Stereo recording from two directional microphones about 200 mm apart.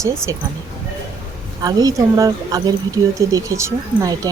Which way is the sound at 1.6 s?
20° right (ahead or behind).